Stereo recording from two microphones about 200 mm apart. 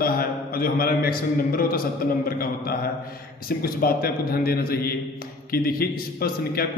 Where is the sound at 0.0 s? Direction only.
50° left (ahead or behind).